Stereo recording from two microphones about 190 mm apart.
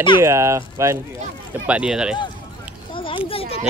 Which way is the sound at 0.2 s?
15° right (ahead or behind).